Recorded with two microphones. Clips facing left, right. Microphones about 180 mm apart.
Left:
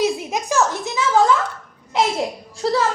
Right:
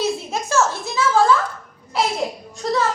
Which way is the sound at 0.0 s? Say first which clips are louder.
Left 2 dB; 15° left (ahead or behind).